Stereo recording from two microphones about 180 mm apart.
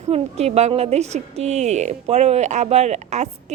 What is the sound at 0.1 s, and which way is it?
A woman's voice, 35° right (ahead or behind).